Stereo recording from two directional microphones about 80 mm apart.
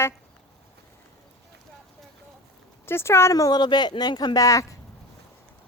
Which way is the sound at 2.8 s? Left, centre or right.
Left.